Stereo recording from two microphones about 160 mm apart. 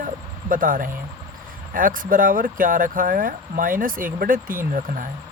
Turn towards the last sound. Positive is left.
turn(degrees=-60)  # may be behind; listen again after turning